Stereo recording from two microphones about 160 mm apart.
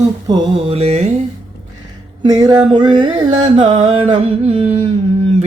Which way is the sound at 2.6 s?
30° right (ahead or behind).